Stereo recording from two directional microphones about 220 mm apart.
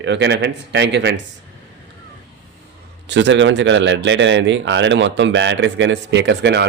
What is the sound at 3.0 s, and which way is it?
Speech, 55° right (ahead or behind).